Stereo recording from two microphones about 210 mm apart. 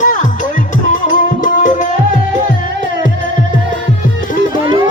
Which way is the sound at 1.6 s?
35° left (ahead or behind).